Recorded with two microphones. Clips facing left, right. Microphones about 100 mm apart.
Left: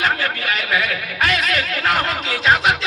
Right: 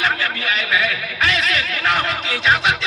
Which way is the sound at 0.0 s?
40° left (ahead or behind).